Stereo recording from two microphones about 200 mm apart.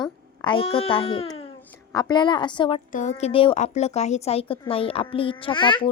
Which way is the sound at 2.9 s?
35° left (ahead or behind).